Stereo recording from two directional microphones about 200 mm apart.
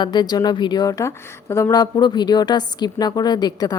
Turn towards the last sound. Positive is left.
turn(degrees=20)  # may be behind; listen again after turning